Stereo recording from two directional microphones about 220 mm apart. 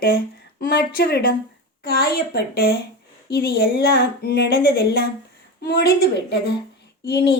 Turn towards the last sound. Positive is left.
turn(degrees=45)  # may be behind; listen again after turning